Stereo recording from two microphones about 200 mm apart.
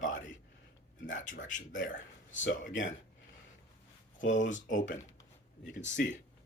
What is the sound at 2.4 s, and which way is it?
Speech, 70° left (ahead or behind).